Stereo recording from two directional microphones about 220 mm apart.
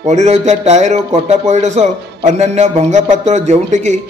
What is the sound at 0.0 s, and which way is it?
A man's voice, 30° right (ahead or behind).